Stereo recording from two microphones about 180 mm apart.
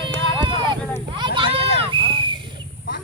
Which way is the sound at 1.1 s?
25° right (ahead or behind).